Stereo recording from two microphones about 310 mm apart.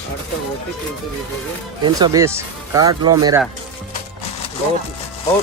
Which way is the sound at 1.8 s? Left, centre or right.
Centre.